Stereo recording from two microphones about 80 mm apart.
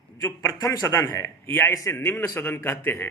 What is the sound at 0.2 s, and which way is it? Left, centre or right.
Speech, left.